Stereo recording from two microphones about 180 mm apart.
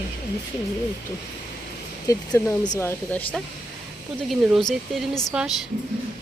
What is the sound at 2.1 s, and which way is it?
Speech, 20° left (ahead or behind).